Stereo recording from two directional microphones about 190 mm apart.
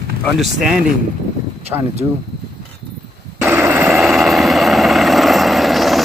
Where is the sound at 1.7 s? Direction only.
15° right (ahead or behind).